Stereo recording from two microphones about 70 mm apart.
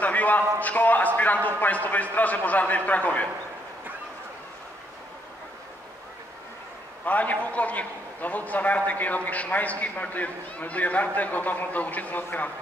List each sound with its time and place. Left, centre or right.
0.0 s a sound: left
0.6 s a man's voice: left
7.1 s a man's voice: left